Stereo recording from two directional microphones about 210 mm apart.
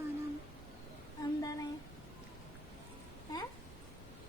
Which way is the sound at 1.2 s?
15° left (ahead or behind).